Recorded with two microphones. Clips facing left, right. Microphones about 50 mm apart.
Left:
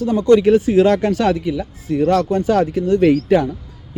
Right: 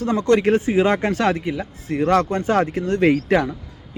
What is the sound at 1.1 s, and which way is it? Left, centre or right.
A man's voice, right.